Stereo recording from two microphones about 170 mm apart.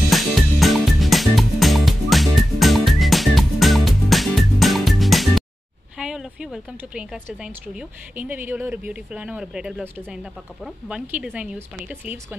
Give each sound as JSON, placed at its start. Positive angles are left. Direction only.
{"t": 0.1, "sound": "music", "side_deg": 0}
{"t": 5.9, "sound": "a woman's voice", "side_deg": -5}